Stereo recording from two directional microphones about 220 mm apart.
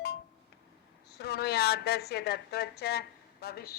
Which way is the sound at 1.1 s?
45° left (ahead or behind).